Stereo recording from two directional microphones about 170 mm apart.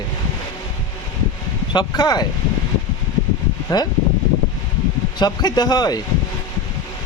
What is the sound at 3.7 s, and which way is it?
Speech, 20° left (ahead or behind).